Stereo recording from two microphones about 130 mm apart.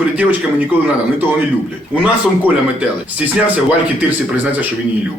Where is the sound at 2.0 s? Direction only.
10° right (ahead or behind).